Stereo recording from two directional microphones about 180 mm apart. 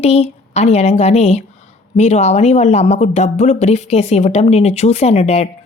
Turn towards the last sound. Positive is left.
turn(degrees=35)  # may be behind; listen again after turning